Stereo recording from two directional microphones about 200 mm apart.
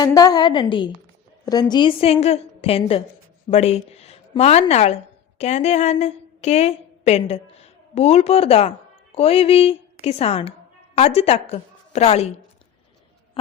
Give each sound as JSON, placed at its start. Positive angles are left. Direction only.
{"t": 0.0, "sound": "a woman's voice", "side_deg": 20}